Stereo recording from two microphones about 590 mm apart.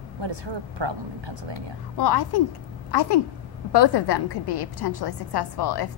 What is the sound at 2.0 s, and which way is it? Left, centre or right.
A woman's voice, left.